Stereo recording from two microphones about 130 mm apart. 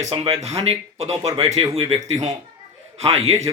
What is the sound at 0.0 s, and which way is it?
Speech, 55° right (ahead or behind).